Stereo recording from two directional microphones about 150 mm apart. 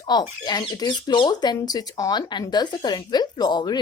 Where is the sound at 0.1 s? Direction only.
30° left (ahead or behind).